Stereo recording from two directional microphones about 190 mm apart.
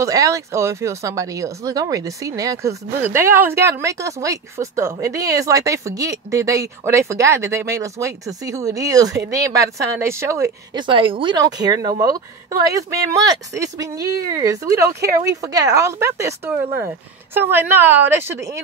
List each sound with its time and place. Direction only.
0.0 s speech: 15° right (ahead or behind)